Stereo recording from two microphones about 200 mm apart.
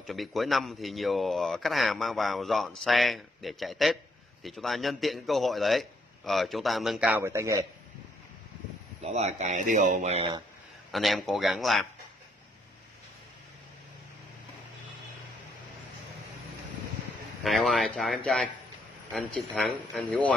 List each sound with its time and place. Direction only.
0.0 s speech: centre (ahead or behind)
9.0 s speech: 35° right (ahead or behind)
10.9 s speech: centre (ahead or behind)
17.4 s speech: centre (ahead or behind)